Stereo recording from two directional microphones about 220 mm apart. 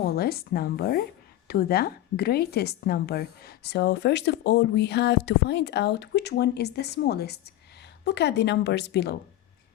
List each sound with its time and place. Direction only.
0.0 s a woman's voice: 45° left (ahead or behind)